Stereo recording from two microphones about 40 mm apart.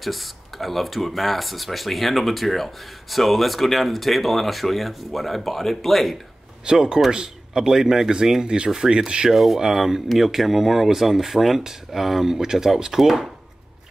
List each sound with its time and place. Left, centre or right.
0.0 s speech: centre
6.6 s rub: right
7.1 s speech: centre
8.9 s rub: right
9.3 s speech: centre